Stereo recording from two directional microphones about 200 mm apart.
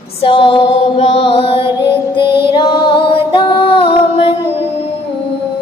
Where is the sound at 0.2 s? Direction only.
25° left (ahead or behind).